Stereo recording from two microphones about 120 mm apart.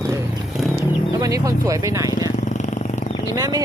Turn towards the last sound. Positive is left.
turn(degrees=-30)  # may be behind; listen again after turning